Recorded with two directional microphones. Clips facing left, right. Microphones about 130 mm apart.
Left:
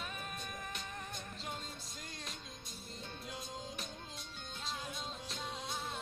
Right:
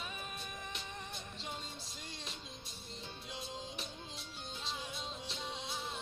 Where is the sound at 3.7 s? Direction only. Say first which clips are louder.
Even; 45° left (ahead or behind).